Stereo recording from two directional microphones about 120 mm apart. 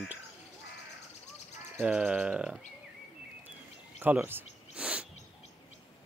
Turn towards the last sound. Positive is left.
turn(degrees=-10)  # may be behind; listen again after turning